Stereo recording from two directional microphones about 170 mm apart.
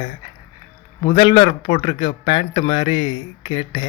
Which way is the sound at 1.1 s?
30° left (ahead or behind).